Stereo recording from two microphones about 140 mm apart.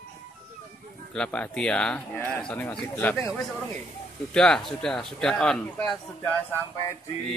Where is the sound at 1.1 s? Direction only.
5° left (ahead or behind).